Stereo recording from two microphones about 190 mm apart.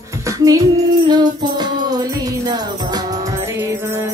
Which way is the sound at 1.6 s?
20° right (ahead or behind).